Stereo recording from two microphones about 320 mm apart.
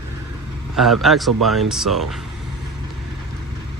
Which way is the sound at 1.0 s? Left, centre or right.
Centre.